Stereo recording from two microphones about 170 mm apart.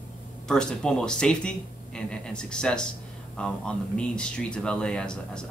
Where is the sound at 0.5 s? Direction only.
5° left (ahead or behind).